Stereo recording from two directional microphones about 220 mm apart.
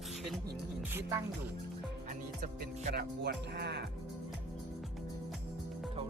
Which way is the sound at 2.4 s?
30° right (ahead or behind).